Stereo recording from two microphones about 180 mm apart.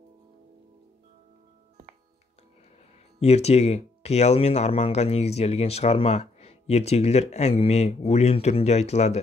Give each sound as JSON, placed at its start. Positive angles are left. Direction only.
{"t": 3.2, "sound": "speech", "side_deg": 35}